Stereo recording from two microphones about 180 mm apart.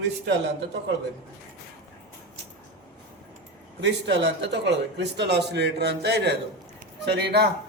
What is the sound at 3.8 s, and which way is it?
Speech, 75° right (ahead or behind).